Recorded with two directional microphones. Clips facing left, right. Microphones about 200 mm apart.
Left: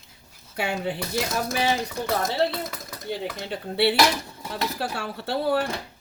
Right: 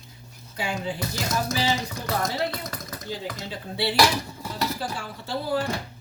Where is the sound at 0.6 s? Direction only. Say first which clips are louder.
Left 2 dB; 65° left (ahead or behind).